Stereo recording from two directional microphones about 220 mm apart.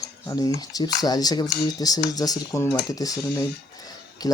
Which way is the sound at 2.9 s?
15° left (ahead or behind).